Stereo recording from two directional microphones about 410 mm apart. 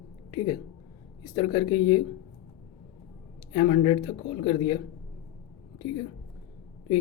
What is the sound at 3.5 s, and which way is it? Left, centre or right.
Speech, centre.